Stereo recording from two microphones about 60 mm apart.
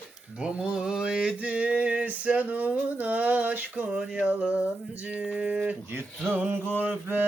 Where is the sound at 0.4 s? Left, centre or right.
Centre.